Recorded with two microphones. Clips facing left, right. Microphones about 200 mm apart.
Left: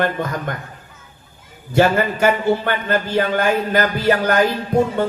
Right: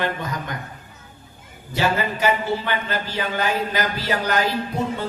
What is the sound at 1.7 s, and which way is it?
A man's voice, 55° left (ahead or behind).